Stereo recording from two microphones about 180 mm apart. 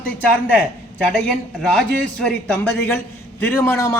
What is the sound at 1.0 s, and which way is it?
A man's voice, centre (ahead or behind).